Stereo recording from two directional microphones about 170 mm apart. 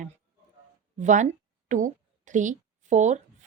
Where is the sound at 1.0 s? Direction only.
45° right (ahead or behind).